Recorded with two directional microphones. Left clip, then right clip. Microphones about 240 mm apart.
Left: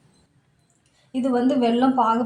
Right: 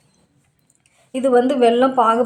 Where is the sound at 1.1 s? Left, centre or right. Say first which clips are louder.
Right 6 dB; right.